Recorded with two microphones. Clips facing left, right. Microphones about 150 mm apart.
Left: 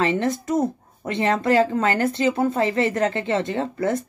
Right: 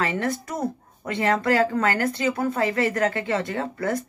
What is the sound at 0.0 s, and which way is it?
Speech, 25° left (ahead or behind).